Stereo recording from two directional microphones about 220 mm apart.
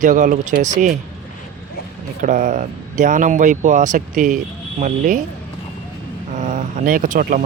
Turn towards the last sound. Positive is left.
turn(degrees=-40)  # may be behind; listen again after turning